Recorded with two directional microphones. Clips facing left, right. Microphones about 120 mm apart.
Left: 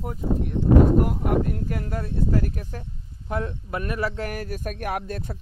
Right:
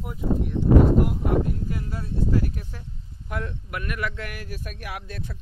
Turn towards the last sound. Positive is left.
turn(degrees=45)  # may be behind; listen again after turning